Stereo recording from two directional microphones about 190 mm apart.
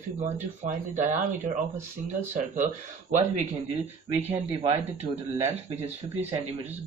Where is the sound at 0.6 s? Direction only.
45° right (ahead or behind).